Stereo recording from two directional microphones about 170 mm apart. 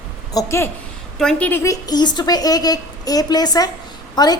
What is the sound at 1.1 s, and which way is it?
A woman's voice, 5° left (ahead or behind).